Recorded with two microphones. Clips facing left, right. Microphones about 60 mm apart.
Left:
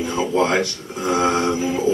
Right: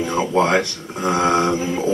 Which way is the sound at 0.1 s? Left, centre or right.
Right.